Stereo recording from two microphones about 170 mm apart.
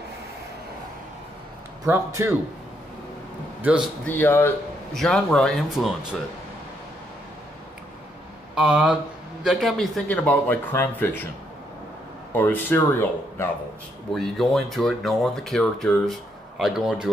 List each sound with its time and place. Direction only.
1.9 s a man's voice: 15° right (ahead or behind)
3.6 s a man's voice: 5° right (ahead or behind)
4.0 s speech: 10° left (ahead or behind)
4.9 s speech: centre (ahead or behind)
8.5 s speech: 5° right (ahead or behind); by 11.2 s 10° left (ahead or behind)
12.3 s speech: 10° left (ahead or behind)
14.1 s speech: centre (ahead or behind)